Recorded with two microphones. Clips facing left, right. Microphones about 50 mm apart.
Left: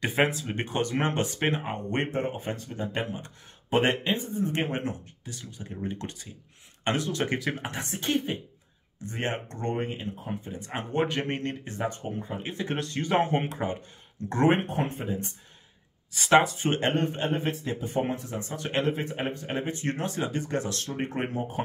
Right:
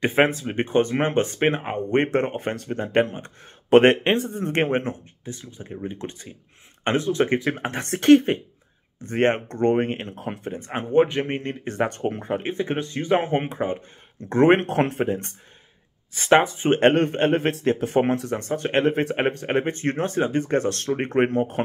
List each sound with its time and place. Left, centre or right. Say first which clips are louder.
0.0 s speech: right 6 dB; right
2.0 s speech: right 7 dB; right
5.8 s speech: right 2 dB; centre
7.6 s speech: right 12 dB; right
10.7 s speech: right 8 dB; right
11.6 s speech: right 8 dB; right
12.4 s speech: right 6 dB; right
14.2 s speech: right 1 dB; right
14.6 s a man's voice: right 8 dB; right
16.1 s speech: right 3 dB; right
16.8 s a man's voice: right 12 dB; right
18.6 s speech: right 6 dB; right
19.0 s speech: right 8 dB; right